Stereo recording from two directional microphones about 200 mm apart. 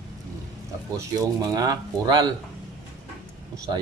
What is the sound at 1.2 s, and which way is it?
Speech, 20° right (ahead or behind).